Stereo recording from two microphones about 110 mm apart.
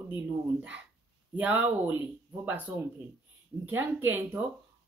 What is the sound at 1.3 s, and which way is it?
Speech, 15° right (ahead or behind).